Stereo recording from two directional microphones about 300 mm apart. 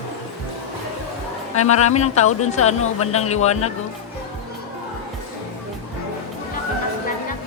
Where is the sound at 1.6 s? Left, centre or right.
Left.